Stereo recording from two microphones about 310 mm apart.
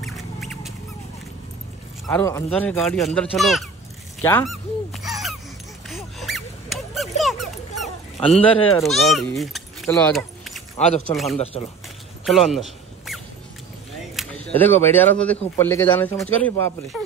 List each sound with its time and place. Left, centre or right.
0.0 s a sound: centre
2.0 s speech: centre
4.2 s honk: centre
5.9 s dog: centre
8.4 s speech: centre
11.3 s speech: centre
12.3 s a sound: centre
14.1 s speech: centre